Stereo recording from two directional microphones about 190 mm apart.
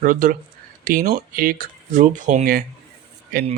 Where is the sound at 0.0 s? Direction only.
45° right (ahead or behind).